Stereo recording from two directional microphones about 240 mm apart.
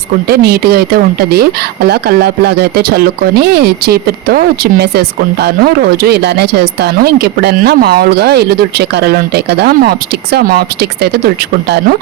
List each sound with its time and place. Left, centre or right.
0.3 s speech: right